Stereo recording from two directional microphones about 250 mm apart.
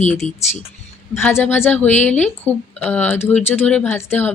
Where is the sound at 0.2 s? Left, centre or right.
Left.